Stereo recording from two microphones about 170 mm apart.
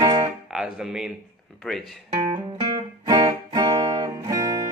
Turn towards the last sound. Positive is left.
turn(degrees=-20)  # may be behind; listen again after turning